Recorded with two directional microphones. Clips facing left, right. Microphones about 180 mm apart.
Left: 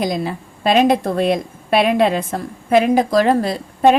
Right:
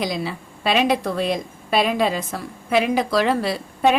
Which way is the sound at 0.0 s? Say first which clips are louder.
Left 4 dB; 50° left (ahead or behind).